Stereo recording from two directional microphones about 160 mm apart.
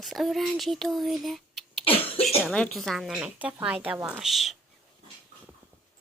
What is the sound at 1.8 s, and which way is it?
Cough, 35° left (ahead or behind).